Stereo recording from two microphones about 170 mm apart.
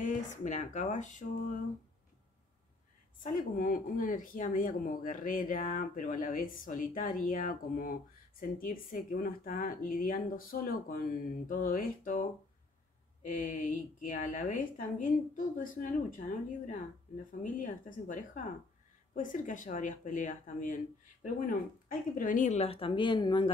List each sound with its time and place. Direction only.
0.0 s speech: 45° left (ahead or behind)
3.2 s speech: 55° left (ahead or behind)
17.4 s speech: 50° left (ahead or behind); by 23.5 s 30° left (ahead or behind)